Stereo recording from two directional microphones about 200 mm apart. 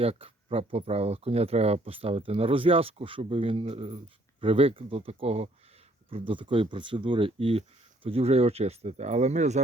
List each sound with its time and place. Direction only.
0.0 s speech: 30° right (ahead or behind)